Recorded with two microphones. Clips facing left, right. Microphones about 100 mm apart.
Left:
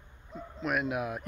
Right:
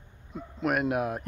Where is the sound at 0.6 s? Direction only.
55° right (ahead or behind).